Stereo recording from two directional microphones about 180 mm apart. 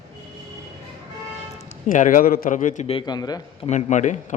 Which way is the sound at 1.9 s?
45° left (ahead or behind).